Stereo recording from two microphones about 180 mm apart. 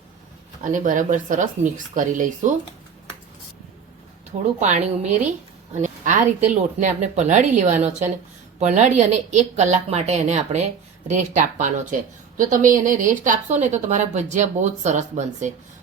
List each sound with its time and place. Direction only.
0.6 s speech: 45° right (ahead or behind)
4.6 s speech: 40° right (ahead or behind)